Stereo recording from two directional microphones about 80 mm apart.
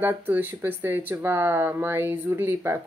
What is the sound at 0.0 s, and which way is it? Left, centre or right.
A woman's voice, right.